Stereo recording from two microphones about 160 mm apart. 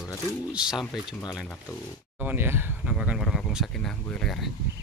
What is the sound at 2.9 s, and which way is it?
Speech, 5° right (ahead or behind).